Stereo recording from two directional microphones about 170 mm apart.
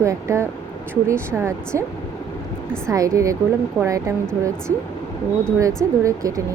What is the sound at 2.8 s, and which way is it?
Speech, 20° right (ahead or behind).